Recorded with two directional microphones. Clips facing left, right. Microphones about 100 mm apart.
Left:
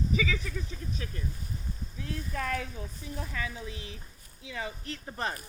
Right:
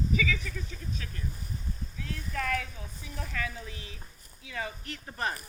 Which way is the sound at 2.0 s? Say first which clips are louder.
Even; 25° left (ahead or behind).